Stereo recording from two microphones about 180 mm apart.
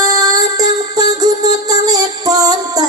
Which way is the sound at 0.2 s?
20° right (ahead or behind).